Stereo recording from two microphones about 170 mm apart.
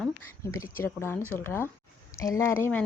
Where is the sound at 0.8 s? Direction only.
15° left (ahead or behind).